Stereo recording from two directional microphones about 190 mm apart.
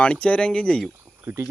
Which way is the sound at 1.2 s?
15° right (ahead or behind).